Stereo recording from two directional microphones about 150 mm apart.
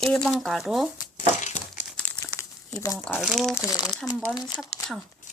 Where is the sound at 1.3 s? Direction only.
50° left (ahead or behind).